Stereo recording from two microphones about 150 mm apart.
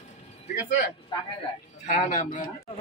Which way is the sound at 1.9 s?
50° left (ahead or behind).